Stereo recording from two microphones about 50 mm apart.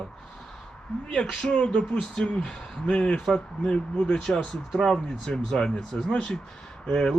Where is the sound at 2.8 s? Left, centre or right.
Left.